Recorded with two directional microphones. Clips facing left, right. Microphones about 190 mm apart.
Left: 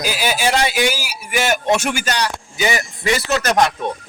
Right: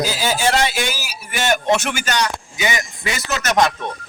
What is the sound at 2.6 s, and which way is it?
Speech, 35° left (ahead or behind).